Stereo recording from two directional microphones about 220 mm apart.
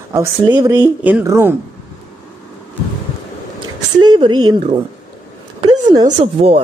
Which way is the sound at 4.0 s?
20° right (ahead or behind).